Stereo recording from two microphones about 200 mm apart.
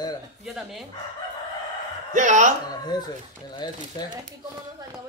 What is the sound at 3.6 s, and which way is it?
Speech, 20° left (ahead or behind).